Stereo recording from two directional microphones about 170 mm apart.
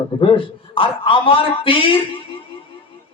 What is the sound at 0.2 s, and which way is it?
A man's voice, 30° left (ahead or behind).